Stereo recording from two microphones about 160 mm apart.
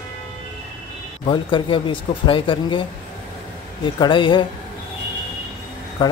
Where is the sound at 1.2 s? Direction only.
30° left (ahead or behind).